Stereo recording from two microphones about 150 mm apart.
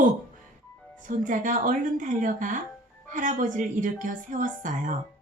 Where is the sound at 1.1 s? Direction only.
60° right (ahead or behind).